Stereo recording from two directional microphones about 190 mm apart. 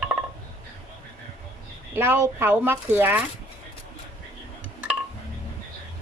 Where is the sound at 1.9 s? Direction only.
15° right (ahead or behind).